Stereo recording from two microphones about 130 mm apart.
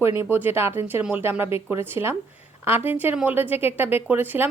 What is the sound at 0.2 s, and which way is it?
Speech, 15° right (ahead or behind).